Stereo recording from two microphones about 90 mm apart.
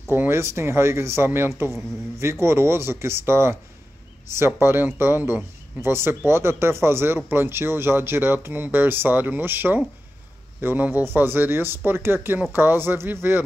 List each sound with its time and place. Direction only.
0.1 s speech: 25° right (ahead or behind)